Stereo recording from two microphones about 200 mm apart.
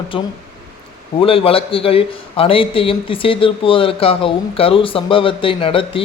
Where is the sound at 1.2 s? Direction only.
25° left (ahead or behind).